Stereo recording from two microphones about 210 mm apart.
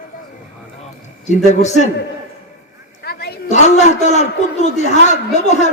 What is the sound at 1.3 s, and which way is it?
Speech, 35° left (ahead or behind).